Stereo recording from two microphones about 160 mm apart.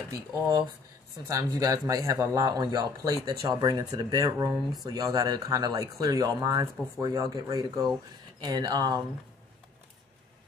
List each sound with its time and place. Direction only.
1.2 s speech: 20° right (ahead or behind)